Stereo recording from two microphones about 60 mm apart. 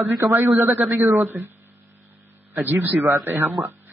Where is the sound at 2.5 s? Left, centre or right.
Right.